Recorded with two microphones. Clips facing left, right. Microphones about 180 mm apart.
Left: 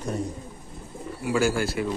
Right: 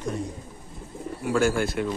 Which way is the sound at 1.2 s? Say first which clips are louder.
Right 1 dB; 5° left (ahead or behind).